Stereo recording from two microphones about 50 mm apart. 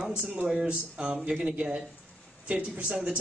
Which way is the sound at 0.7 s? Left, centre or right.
Right.